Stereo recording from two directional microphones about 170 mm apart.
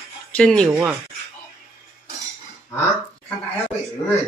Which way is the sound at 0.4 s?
5° left (ahead or behind).